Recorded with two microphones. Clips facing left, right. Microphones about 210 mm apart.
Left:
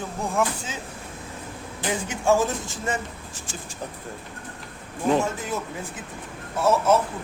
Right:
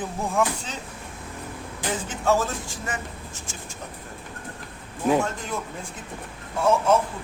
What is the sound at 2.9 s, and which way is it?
Speech, 35° left (ahead or behind).